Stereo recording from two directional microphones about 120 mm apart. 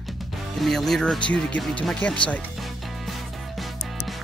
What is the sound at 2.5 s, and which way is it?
Music, centre (ahead or behind).